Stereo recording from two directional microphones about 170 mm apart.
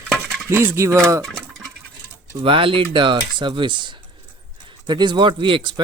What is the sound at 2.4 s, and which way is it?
Speech, 30° right (ahead or behind).